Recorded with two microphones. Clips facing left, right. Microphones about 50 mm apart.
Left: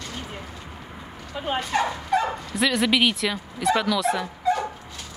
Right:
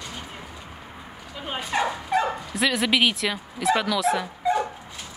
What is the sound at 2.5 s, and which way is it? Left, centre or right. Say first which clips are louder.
Speech: left 1 dB; centre.